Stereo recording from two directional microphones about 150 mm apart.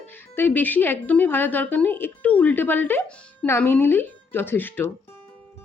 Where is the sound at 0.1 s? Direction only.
15° left (ahead or behind).